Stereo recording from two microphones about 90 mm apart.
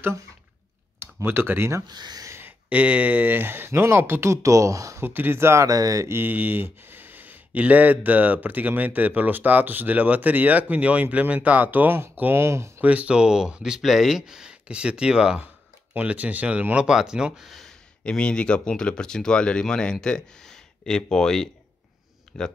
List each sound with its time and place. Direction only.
0.9 s speech: 25° right (ahead or behind)
1.9 s speech: 50° right (ahead or behind)
2.3 s speech: 20° right (ahead or behind); by 5.0 s 35° right (ahead or behind)
5.0 s speech: 25° right (ahead or behind); by 6.1 s 40° right (ahead or behind)
6.1 s speech: 20° right (ahead or behind)
12.8 s speech: 15° right (ahead or behind); by 21.5 s 5° left (ahead or behind)